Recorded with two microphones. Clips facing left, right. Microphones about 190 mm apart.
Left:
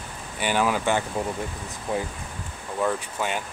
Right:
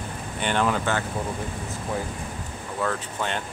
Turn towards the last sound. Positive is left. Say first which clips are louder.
# left 1 dB
turn(degrees=10)  # may be behind; listen again after turning